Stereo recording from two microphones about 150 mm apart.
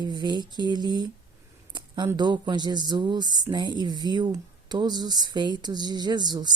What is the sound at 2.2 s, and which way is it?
Speech, 30° right (ahead or behind).